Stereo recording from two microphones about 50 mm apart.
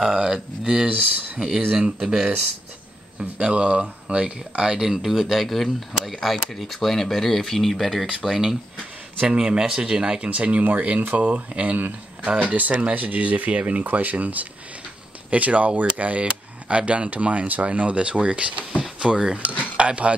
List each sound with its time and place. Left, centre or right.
0.1 s speech: centre
0.8 s speech: right
2.0 s speech: centre
3.2 s speech: right
4.7 s speech: centre; by 18.7 s right
18.8 s a sound: right
19.6 s speech: right